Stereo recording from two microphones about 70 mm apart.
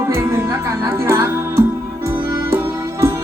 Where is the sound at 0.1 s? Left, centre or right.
Right.